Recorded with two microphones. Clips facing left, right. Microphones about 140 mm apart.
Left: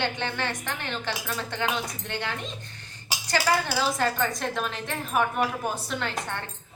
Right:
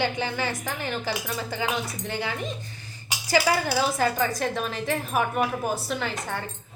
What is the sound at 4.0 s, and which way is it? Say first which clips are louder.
A woman's voice: right 2 dB; 5° right (ahead or behind).